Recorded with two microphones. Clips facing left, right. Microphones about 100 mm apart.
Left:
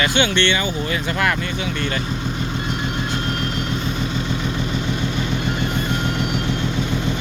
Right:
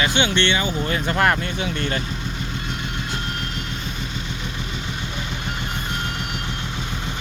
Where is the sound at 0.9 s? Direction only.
40° right (ahead or behind).